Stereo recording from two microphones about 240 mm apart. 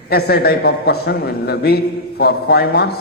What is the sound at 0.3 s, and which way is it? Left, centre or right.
A man's voice, left.